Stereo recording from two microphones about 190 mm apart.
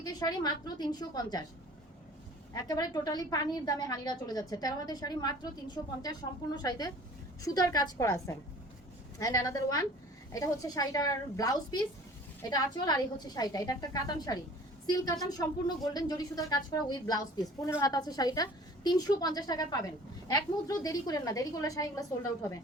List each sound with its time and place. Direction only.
0.0 s a woman's voice: 20° left (ahead or behind)
2.6 s a woman's voice: 20° left (ahead or behind)